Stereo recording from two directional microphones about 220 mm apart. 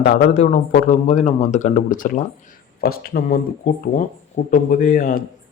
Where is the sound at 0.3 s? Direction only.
35° left (ahead or behind).